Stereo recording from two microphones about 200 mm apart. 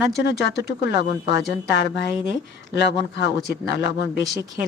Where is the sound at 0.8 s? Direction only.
60° left (ahead or behind).